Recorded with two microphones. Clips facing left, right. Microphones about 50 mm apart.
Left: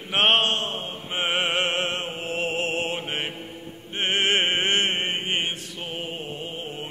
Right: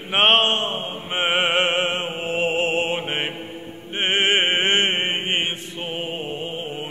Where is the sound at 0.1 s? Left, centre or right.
Right.